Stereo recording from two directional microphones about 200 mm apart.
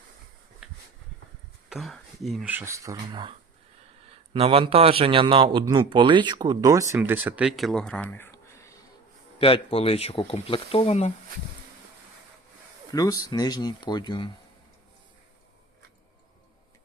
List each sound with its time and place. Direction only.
0.6 s a sound: 5° right (ahead or behind)
1.7 s speech: centre (ahead or behind)
9.4 s speech: 25° left (ahead or behind)
12.9 s speech: 15° left (ahead or behind)